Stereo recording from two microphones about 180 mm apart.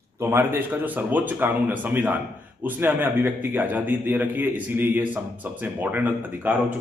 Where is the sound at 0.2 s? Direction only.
10° right (ahead or behind).